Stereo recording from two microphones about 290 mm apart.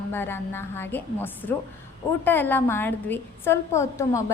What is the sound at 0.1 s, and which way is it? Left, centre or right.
A woman's voice, centre.